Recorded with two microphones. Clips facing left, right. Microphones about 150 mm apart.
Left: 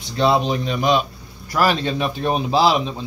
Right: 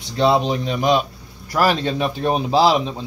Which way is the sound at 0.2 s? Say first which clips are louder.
Right 1 dB; 35° right (ahead or behind).